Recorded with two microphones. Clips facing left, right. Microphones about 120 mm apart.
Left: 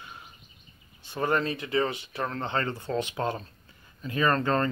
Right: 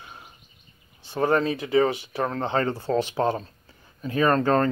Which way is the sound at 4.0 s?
5° right (ahead or behind).